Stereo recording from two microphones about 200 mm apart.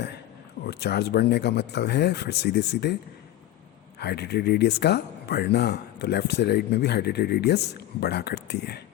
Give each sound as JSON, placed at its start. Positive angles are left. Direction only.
{"t": 0.6, "sound": "speech", "side_deg": 55}
{"t": 4.0, "sound": "speech", "side_deg": 55}